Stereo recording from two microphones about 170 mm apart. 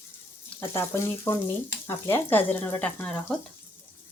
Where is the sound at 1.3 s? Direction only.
15° left (ahead or behind).